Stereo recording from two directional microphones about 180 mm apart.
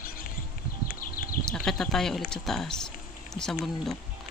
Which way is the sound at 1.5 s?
5° left (ahead or behind).